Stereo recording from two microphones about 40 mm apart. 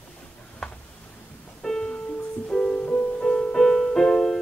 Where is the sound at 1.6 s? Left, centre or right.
Centre.